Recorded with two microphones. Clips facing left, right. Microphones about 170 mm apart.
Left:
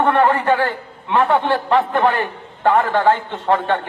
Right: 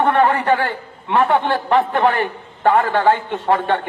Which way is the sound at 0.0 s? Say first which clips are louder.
Even; 15° right (ahead or behind).